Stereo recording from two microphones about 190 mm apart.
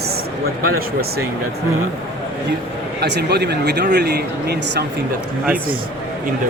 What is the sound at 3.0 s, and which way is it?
Speech, 60° right (ahead or behind).